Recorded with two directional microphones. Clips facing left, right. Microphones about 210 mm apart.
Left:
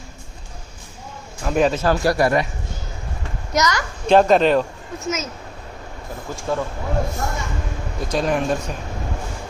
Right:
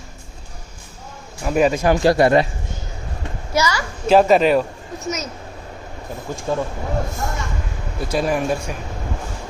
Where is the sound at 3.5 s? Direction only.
10° right (ahead or behind).